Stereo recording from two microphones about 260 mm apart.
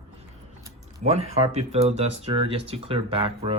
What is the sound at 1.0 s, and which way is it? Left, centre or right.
Speech, right.